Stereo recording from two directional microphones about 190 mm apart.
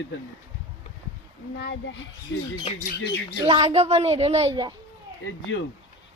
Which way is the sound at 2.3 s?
80° left.